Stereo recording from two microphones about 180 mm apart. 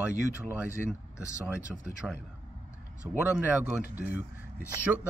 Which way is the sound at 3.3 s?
5° right (ahead or behind).